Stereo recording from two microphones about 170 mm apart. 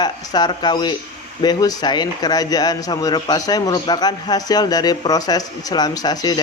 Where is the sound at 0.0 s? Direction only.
25° left (ahead or behind).